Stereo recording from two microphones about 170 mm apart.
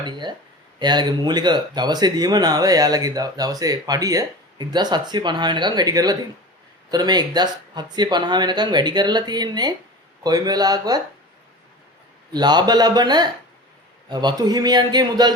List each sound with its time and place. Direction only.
0.0 s speech: 25° right (ahead or behind)
12.3 s speech: 25° right (ahead or behind)